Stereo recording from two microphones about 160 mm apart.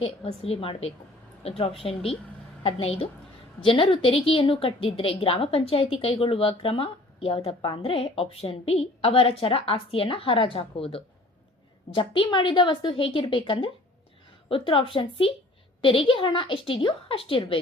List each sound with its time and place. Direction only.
0.0 s a woman's voice: 40° left (ahead or behind)